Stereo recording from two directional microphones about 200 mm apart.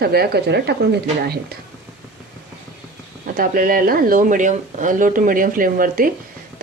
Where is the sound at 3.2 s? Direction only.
45° right (ahead or behind).